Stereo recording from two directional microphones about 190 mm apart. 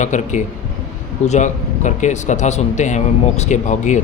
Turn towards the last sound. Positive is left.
turn(degrees=40)  # may be behind; listen again after turning